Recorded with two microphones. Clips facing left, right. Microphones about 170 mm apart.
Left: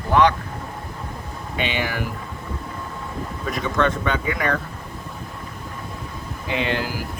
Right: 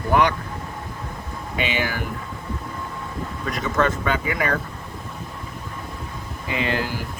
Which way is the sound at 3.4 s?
Centre (ahead or behind).